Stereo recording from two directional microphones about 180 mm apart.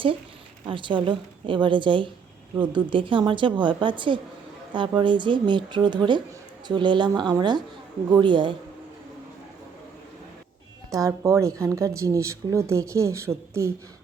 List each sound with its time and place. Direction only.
0.7 s a woman's voice: 25° right (ahead or behind)
10.9 s speech: 20° right (ahead or behind)